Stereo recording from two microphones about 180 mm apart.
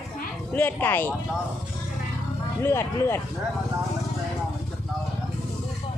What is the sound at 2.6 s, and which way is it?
Speech, 15° left (ahead or behind).